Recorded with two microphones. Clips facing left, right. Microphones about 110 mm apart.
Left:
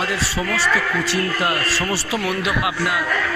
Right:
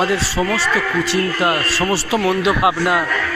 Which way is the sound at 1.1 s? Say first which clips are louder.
Right 5 dB; 25° right (ahead or behind).